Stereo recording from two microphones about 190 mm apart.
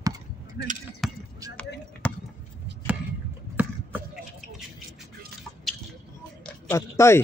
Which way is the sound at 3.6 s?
10° right (ahead or behind).